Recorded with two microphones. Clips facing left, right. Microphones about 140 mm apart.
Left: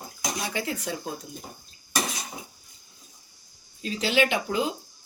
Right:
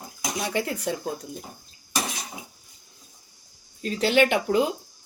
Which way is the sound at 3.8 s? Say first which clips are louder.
Right 4 dB; 55° right (ahead or behind).